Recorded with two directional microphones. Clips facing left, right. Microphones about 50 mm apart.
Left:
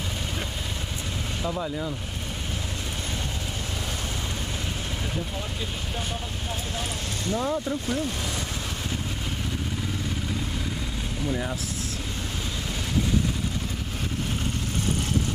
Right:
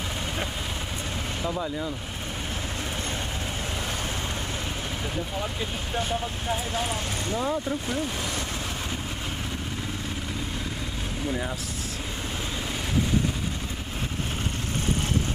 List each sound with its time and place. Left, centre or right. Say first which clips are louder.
1.4 s speech: left 1 dB; centre
6.5 s speech: right 5 dB; centre
7.3 s speech: left 1 dB; centre
11.2 s speech: left 1 dB; centre